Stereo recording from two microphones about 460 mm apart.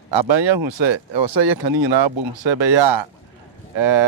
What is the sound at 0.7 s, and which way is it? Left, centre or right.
Speech, right.